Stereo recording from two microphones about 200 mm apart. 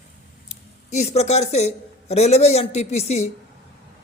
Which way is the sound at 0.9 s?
35° left (ahead or behind).